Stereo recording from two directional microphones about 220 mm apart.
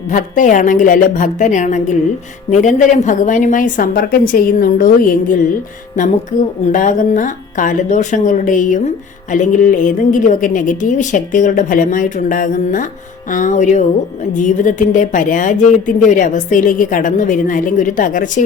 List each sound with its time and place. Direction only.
0.1 s a woman's voice: 35° left (ahead or behind)
6.7 s a woman's voice: 35° left (ahead or behind)